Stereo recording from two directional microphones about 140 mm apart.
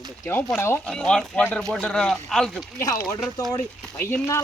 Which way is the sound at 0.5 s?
20° left (ahead or behind).